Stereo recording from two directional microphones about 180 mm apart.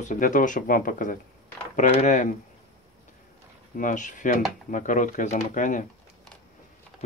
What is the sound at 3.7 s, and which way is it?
Speech, 45° left (ahead or behind).